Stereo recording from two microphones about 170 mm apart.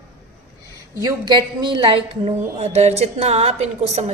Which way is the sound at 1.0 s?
20° right (ahead or behind).